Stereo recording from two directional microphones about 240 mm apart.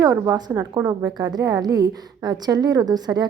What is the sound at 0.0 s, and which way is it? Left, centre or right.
A woman's voice, centre.